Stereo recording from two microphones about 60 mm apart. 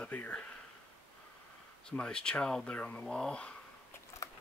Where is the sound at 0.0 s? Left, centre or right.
Left.